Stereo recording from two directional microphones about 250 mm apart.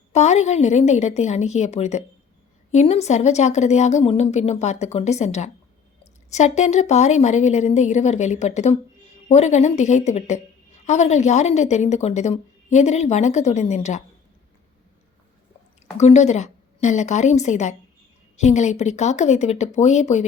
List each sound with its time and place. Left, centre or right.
0.1 s speech: left
16.0 s speech: left